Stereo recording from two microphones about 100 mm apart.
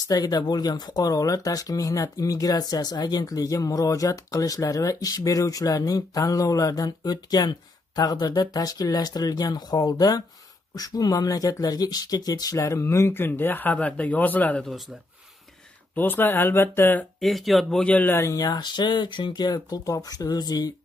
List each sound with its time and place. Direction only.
0.1 s speech: 40° left (ahead or behind); by 14.7 s 15° left (ahead or behind)
15.9 s speech: 20° left (ahead or behind)
17.2 s speech: centre (ahead or behind); by 18.2 s 15° left (ahead or behind)
18.2 s speech: 35° left (ahead or behind)